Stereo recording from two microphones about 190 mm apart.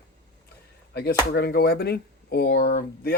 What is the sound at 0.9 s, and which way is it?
Speech, 60° left (ahead or behind).